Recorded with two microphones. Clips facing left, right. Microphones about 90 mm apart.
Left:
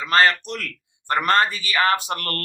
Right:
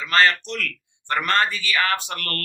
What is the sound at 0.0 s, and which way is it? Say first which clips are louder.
Speech: left 1 dB; 35° left (ahead or behind).